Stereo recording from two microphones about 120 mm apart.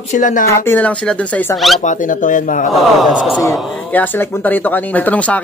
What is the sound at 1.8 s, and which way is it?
Speech, 90° left.